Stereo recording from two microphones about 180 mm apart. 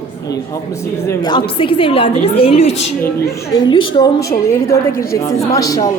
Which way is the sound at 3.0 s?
15° left (ahead or behind).